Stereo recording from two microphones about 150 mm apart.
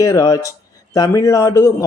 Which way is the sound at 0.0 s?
20° left (ahead or behind).